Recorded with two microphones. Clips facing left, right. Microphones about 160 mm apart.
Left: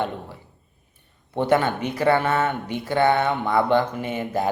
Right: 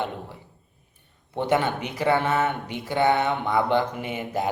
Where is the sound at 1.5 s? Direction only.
15° right (ahead or behind).